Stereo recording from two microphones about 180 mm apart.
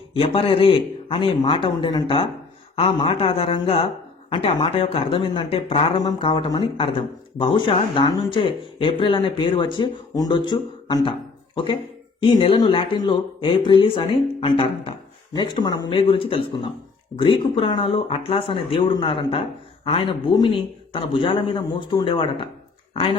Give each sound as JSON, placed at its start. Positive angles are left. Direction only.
{"t": 0.1, "sound": "speech", "side_deg": 30}